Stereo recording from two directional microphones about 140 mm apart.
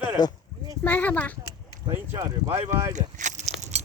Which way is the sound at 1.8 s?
30° right (ahead or behind).